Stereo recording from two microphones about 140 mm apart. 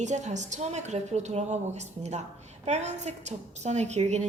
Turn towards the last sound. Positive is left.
turn(degrees=-55)  # may be behind; listen again after turning